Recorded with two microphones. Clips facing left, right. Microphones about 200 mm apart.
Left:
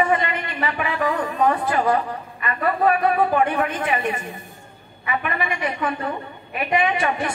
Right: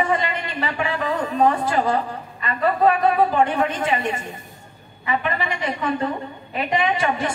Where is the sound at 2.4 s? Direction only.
25° right (ahead or behind).